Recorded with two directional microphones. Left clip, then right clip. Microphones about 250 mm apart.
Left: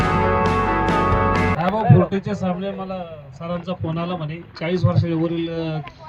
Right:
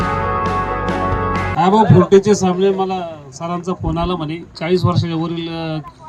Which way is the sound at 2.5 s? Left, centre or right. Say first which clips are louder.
Right 10 dB; right.